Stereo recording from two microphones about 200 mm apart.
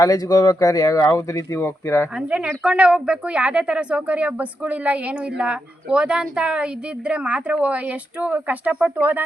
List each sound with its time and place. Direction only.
0.0 s speech: 20° left (ahead or behind)
2.1 s a woman's voice: 5° right (ahead or behind)